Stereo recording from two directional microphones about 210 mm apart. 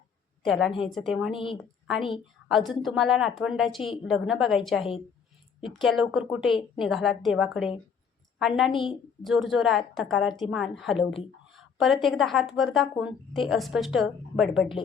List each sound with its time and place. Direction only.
0.4 s a woman's voice: centre (ahead or behind)